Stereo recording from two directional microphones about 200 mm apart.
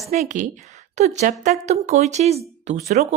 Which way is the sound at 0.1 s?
35° right (ahead or behind).